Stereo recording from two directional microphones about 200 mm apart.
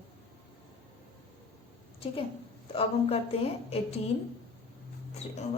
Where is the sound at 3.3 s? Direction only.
30° left (ahead or behind).